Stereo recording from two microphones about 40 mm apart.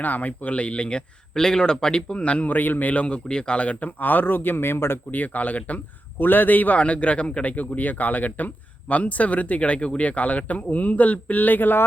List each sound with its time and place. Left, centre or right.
0.0 s speech: left
1.3 s speech: centre
2.1 s speech: left
2.5 s speech: left
3.2 s speech: left
5.1 s speech: left
6.1 s speech: left
6.7 s speech: left